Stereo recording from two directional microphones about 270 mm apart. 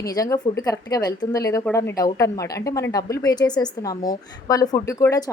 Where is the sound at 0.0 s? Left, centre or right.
Centre.